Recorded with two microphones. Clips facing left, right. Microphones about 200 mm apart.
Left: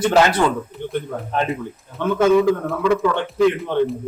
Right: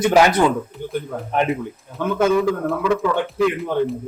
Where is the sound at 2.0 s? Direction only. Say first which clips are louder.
Left 2 dB; centre (ahead or behind).